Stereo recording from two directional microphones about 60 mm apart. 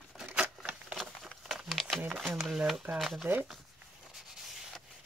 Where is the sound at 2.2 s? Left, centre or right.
Centre.